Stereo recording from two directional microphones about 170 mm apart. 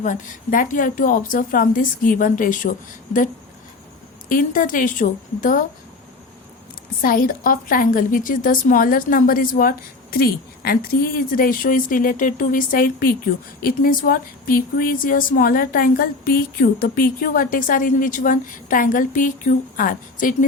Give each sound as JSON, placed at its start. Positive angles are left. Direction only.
{"t": 0.0, "sound": "a woman's voice", "side_deg": 50}
{"t": 4.3, "sound": "a woman's voice", "side_deg": 55}
{"t": 7.0, "sound": "speech", "side_deg": 55}